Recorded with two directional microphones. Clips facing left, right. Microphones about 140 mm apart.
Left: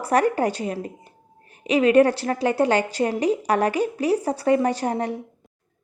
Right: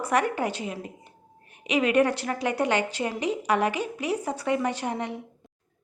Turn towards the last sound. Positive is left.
turn(degrees=40)  # may be behind; listen again after turning